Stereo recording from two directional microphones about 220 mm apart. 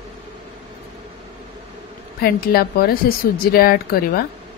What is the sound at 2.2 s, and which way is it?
Speech, 45° left (ahead or behind).